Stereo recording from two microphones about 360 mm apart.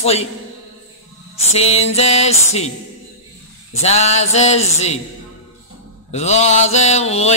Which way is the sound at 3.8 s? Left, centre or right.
Centre.